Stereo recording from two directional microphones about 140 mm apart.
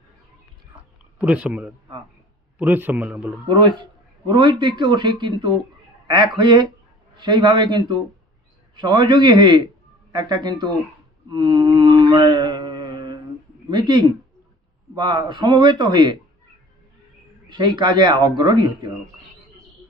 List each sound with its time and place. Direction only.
0.7 s a sound: 10° right (ahead or behind)
2.6 s a man's voice: 10° right (ahead or behind)
3.4 s a man's voice: 35° right (ahead or behind)
11.2 s mantra: 35° right (ahead or behind)
13.7 s a man's voice: 30° right (ahead or behind)
17.5 s a man's voice: 35° right (ahead or behind)